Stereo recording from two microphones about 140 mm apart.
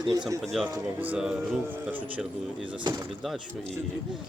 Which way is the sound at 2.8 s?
30° right (ahead or behind).